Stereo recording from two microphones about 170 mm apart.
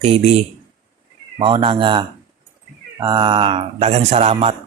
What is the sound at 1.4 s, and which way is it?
Speech, 30° right (ahead or behind).